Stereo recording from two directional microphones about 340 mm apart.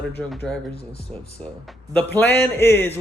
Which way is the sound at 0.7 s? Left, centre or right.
Centre.